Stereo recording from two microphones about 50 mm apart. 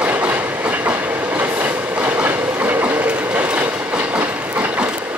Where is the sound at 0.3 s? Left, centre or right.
Right.